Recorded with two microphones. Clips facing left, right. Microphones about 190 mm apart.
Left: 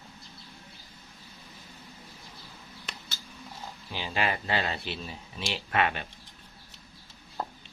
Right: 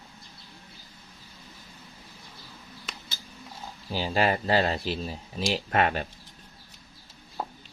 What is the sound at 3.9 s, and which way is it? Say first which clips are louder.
Speech: right 6 dB; 40° right (ahead or behind).